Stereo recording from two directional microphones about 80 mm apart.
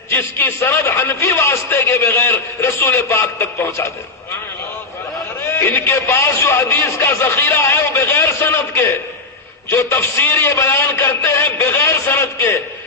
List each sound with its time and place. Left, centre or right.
0.1 s a man's voice: left
5.5 s a man's voice: left